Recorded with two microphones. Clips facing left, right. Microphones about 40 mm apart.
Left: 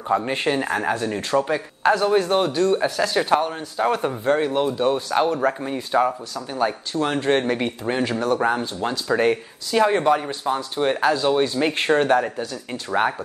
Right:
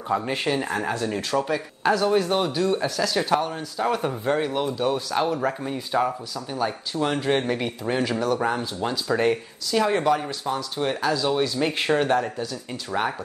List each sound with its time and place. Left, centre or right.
0.1 s speech: centre